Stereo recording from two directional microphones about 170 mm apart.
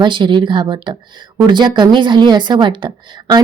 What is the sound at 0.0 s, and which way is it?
A woman's voice, 30° right (ahead or behind).